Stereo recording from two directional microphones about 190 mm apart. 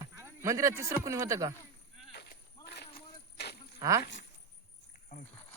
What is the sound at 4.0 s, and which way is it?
Speech, 70° left (ahead or behind).